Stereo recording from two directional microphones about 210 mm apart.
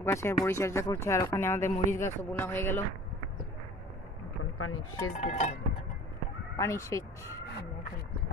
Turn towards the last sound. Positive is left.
turn(degrees=15)  # may be behind; listen again after turning